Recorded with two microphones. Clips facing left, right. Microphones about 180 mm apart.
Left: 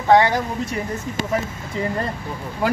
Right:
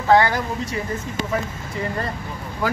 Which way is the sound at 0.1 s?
20° left (ahead or behind).